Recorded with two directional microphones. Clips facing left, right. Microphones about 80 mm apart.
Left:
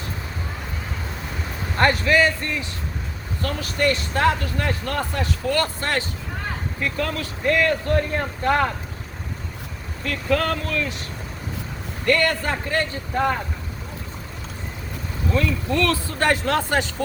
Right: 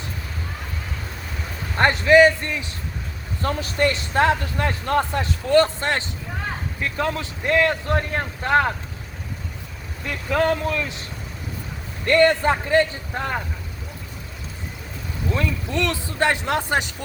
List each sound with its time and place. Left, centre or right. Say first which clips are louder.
1.8 s speech: right 4 dB; right
10.0 s speech: right 1 dB; centre
12.0 s speech: right 4 dB; right
15.4 s speech: left 3 dB; right